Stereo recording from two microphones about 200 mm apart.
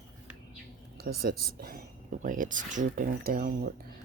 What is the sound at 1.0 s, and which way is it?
Speech, 50° right (ahead or behind).